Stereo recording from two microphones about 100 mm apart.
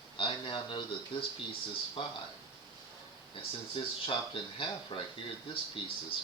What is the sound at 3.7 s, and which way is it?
Speech, 60° left (ahead or behind).